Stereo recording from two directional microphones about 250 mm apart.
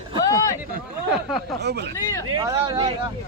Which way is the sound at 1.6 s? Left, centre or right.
Right.